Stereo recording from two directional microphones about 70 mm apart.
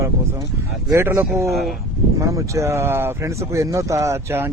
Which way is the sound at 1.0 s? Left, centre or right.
Right.